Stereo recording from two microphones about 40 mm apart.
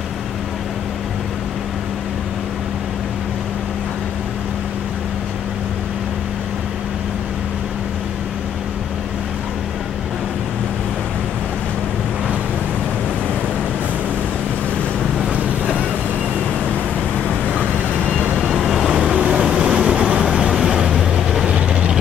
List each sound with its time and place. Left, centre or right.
15.3 s vehicle: right
18.4 s vehicle: centre
18.9 s vehicle: centre
20.2 s vehicle: centre
21.5 s vehicle: right